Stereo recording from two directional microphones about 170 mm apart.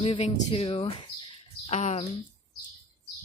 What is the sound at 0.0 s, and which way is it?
Speech, 30° left (ahead or behind).